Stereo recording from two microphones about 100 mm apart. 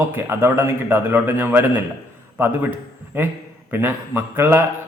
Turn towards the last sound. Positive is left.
turn(degrees=-20)  # may be behind; listen again after turning